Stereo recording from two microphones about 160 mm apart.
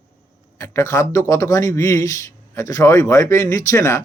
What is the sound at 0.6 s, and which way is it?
A man's voice, 15° left (ahead or behind).